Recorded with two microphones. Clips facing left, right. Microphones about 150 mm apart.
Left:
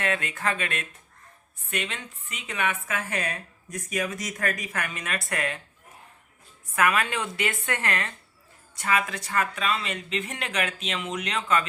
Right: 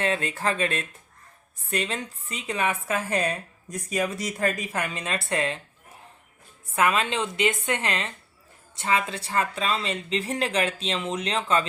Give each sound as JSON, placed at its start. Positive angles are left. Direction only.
{"t": 0.0, "sound": "speech", "side_deg": -30}
{"t": 6.7, "sound": "a woman's voice", "side_deg": -25}